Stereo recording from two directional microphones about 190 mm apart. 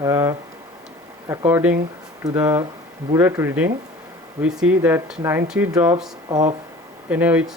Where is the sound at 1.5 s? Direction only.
10° right (ahead or behind).